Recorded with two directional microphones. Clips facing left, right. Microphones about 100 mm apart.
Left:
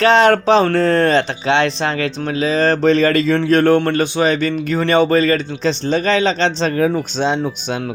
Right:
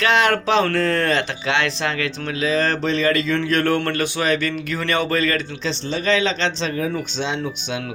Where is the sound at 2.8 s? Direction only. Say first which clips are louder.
Left 6 dB; 45° left (ahead or behind); by 5.5 s 30° left (ahead or behind).